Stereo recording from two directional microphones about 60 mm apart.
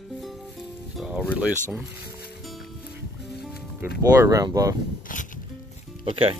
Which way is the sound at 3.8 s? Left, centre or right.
Right.